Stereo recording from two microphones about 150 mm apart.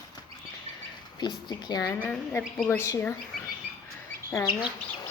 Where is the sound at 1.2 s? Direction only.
30° left (ahead or behind).